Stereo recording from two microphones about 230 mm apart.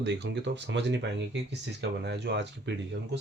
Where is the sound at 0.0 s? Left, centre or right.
Right.